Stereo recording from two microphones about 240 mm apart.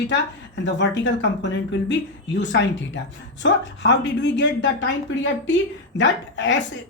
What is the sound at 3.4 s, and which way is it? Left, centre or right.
Speech, left.